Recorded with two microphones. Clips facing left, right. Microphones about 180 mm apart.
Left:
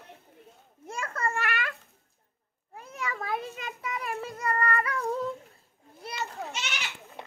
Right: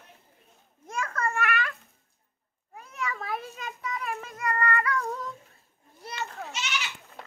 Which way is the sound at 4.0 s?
35° left (ahead or behind).